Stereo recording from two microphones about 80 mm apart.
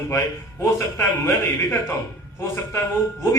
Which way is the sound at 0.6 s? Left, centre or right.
Left.